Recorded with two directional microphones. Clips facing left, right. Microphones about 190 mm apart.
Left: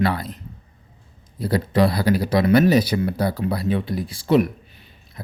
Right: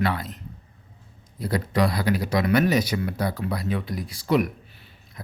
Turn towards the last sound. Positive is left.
turn(degrees=30)  # may be behind; listen again after turning